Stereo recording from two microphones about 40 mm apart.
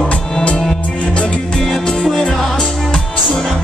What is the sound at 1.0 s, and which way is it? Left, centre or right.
Music, left.